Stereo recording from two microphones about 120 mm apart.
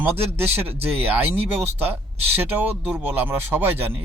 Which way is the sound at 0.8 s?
15° right (ahead or behind).